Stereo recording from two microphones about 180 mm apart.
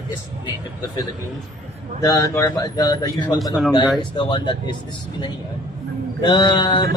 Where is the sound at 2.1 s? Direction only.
20° left (ahead or behind).